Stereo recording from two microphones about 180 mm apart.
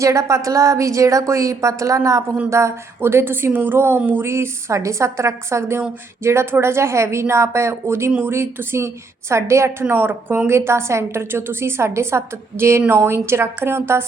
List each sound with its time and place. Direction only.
0.0 s a woman's voice: 15° right (ahead or behind)